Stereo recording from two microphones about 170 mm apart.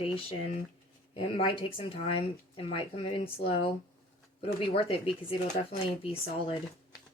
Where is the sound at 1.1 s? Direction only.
35° left (ahead or behind).